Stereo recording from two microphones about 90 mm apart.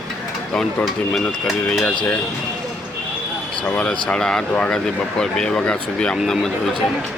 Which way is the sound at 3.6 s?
15° left (ahead or behind).